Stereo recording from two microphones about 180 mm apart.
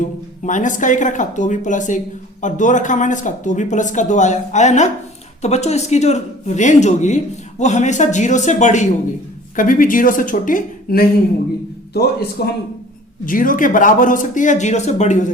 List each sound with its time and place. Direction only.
0.0 s speech: 45° left (ahead or behind)
12.4 s speech: 60° left (ahead or behind)
13.2 s speech: 50° left (ahead or behind)